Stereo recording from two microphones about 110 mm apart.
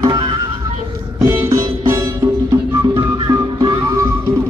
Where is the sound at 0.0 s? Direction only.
40° right (ahead or behind).